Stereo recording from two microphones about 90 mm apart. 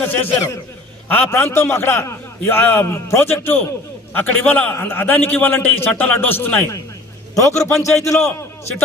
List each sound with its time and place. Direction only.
0.0 s a man's voice: 20° left (ahead or behind)
7.3 s a man's voice: 35° left (ahead or behind)